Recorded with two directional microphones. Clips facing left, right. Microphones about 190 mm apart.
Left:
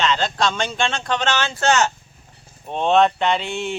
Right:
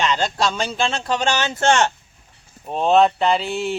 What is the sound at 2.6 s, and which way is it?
Speech, 5° right (ahead or behind).